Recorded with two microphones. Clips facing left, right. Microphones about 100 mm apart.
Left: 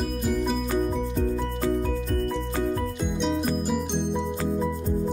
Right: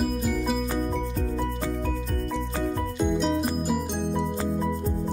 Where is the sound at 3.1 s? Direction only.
5° right (ahead or behind).